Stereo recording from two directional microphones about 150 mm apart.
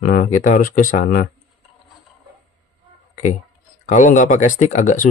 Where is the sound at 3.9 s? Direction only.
55° left (ahead or behind).